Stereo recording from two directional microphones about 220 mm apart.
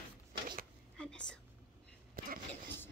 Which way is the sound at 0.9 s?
5° left (ahead or behind).